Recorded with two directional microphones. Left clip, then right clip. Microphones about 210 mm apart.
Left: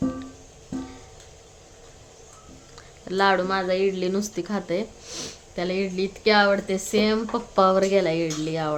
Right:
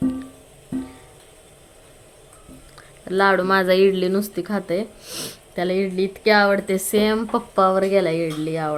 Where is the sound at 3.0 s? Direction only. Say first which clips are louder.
Right 3 dB; 10° right (ahead or behind).